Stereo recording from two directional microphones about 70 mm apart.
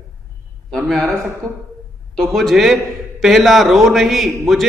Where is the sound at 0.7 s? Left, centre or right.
Centre.